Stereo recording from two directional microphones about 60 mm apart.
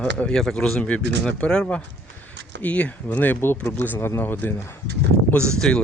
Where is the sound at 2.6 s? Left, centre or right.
Left.